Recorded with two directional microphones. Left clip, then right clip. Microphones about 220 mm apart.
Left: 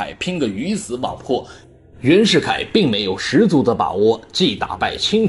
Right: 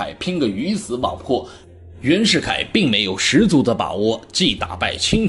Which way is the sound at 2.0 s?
5° left (ahead or behind).